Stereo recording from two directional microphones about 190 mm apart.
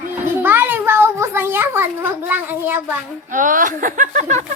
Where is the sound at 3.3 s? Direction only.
45° right (ahead or behind).